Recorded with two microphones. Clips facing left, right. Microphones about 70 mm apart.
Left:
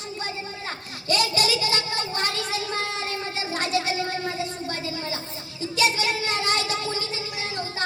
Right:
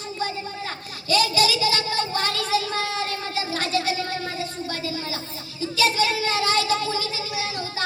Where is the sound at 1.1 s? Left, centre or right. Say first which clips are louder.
Right 3 dB; left.